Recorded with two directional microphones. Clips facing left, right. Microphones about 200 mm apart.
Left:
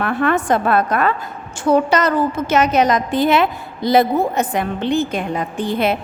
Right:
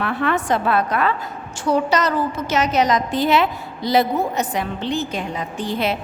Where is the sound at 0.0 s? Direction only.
50° left (ahead or behind).